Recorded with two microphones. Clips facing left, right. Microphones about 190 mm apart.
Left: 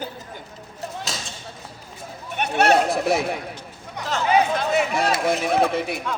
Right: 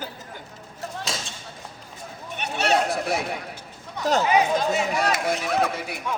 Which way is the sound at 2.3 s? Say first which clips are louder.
Left 5 dB; 55° left (ahead or behind).